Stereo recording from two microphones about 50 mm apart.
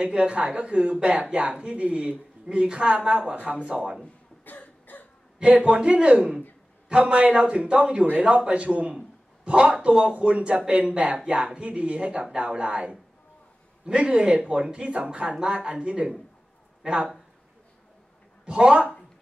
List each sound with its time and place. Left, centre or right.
0.0 s a man's voice: right
4.5 s cough: left
5.4 s a man's voice: right
18.4 s speech: right